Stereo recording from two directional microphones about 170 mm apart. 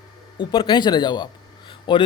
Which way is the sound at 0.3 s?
30° left (ahead or behind).